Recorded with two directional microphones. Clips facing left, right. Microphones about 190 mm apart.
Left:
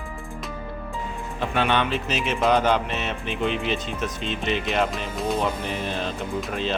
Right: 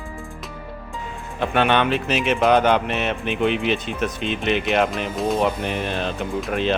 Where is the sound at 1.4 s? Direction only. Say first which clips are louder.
Right 4 dB; 60° right (ahead or behind).